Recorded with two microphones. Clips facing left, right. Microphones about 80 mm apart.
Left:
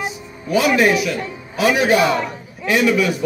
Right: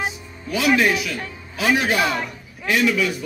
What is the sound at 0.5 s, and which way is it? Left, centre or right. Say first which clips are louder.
Speech: left 3 dB; left.